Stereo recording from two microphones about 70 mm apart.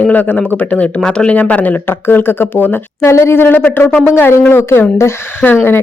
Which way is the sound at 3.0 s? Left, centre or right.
Left.